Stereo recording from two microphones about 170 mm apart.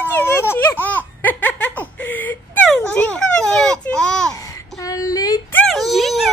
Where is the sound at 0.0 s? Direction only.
10° left (ahead or behind).